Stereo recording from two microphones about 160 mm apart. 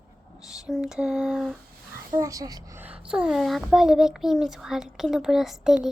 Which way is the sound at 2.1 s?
20° right (ahead or behind).